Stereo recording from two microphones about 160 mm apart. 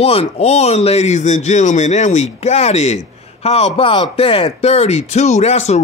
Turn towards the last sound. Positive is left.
turn(degrees=40)  # may be behind; listen again after turning